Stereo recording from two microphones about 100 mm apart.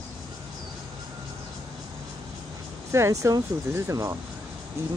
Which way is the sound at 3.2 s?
30° right (ahead or behind).